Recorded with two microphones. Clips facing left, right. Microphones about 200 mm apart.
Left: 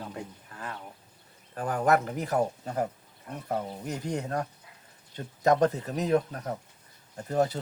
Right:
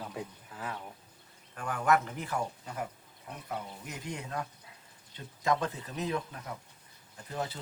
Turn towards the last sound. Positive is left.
turn(degrees=45)  # may be behind; listen again after turning